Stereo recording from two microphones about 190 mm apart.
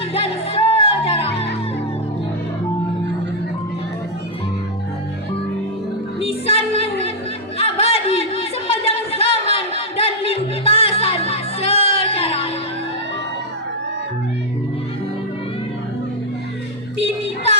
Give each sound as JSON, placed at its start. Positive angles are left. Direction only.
{"t": 0.1, "sound": "music", "side_deg": 30}
{"t": 6.1, "sound": "music", "side_deg": 30}
{"t": 7.6, "sound": "a sound", "side_deg": 30}